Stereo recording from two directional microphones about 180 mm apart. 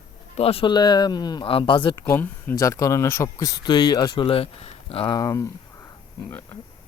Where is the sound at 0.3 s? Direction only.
30° left (ahead or behind).